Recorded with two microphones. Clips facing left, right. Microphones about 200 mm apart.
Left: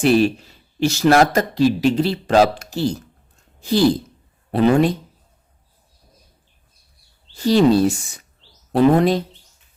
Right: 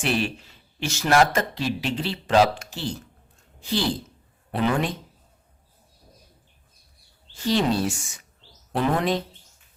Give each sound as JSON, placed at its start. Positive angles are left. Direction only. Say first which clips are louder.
{"t": 0.0, "sound": "speech", "louder": "left 10 dB", "side_deg": 35}
{"t": 7.3, "sound": "speech", "louder": "left 8 dB", "side_deg": 35}